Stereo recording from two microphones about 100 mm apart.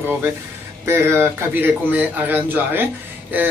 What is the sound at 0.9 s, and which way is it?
A man's voice, 25° right (ahead or behind).